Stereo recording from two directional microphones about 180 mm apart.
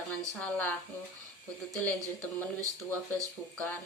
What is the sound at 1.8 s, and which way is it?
Speech, 10° left (ahead or behind).